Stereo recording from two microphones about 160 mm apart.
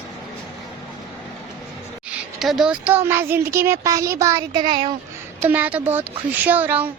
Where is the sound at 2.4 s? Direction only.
Centre (ahead or behind); by 4.9 s 30° right (ahead or behind).